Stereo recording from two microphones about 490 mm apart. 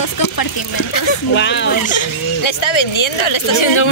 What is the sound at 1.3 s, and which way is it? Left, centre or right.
Speech, left.